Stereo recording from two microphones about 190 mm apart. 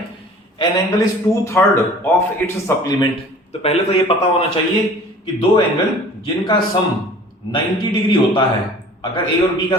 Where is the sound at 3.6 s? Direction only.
35° left (ahead or behind).